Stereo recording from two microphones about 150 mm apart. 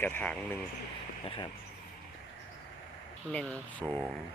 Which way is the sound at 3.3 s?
10° left (ahead or behind).